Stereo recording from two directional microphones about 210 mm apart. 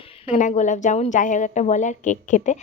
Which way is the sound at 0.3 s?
35° left (ahead or behind).